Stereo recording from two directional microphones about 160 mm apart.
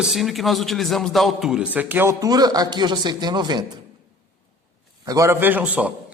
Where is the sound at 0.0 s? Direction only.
Centre (ahead or behind).